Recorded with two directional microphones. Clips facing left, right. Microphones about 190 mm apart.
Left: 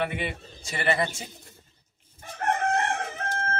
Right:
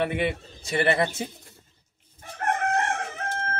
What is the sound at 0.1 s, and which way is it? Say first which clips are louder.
Speech: right 6 dB; 60° right (ahead or behind).